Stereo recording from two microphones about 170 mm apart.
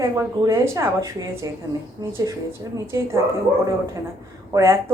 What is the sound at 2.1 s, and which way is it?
A woman's voice, 20° right (ahead or behind).